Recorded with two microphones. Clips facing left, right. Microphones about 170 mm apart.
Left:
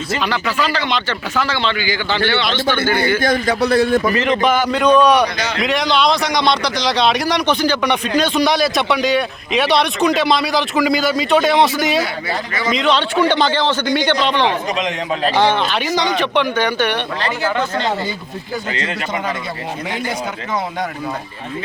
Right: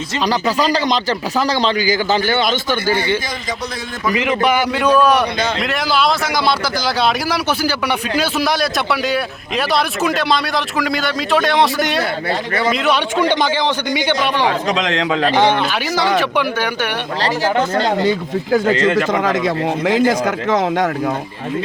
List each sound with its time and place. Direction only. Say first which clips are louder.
0.3 s a man's voice: right 7 dB; 40° right (ahead or behind)
3.2 s a man's voice: left 9 dB; 65° left (ahead or behind)
4.1 s a man's voice: left 1 dB; 10° right (ahead or behind)
14.8 s speech: right 3 dB; 90° right
16.0 s a man's voice: right 2 dB; 10° right (ahead or behind)
18.5 s speech: right 10 dB; 55° right (ahead or behind)
19.9 s speech: right 10 dB; 90° right